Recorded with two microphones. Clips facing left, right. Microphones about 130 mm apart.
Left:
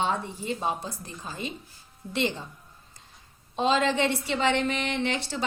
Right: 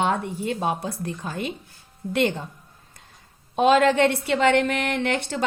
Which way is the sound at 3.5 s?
65° right (ahead or behind).